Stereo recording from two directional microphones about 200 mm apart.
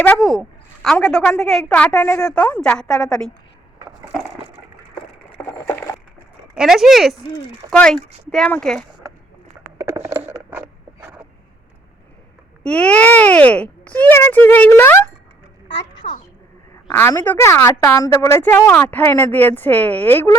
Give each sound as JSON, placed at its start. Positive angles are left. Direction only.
{"t": 0.0, "sound": "a woman's voice", "side_deg": 5}
{"t": 5.5, "sound": "a sound", "side_deg": 10}
{"t": 6.6, "sound": "a woman's voice", "side_deg": 0}
{"t": 9.7, "sound": "a sound", "side_deg": -15}
{"t": 12.6, "sound": "a woman's voice", "side_deg": 5}
{"t": 16.0, "sound": "speech", "side_deg": 30}
{"t": 16.9, "sound": "a woman's voice", "side_deg": 10}